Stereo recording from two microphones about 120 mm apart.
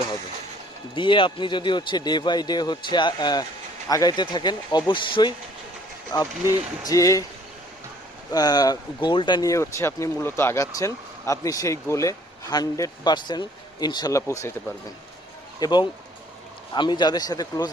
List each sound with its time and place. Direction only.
0.9 s speech: 45° left (ahead or behind); by 7.3 s 30° left (ahead or behind)
8.3 s speech: 35° left (ahead or behind)
9.5 s speech: 25° left (ahead or behind)
15.6 s speech: 40° left (ahead or behind)